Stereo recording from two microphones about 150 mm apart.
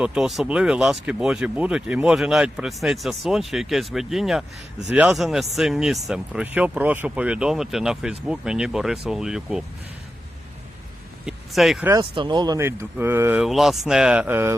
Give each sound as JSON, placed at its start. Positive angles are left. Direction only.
{"t": 0.0, "sound": "speech", "side_deg": -5}
{"t": 11.3, "sound": "speech", "side_deg": 0}
{"t": 12.1, "sound": "speech", "side_deg": -30}
{"t": 12.5, "sound": "speech", "side_deg": -15}
{"t": 13.4, "sound": "speech", "side_deg": 0}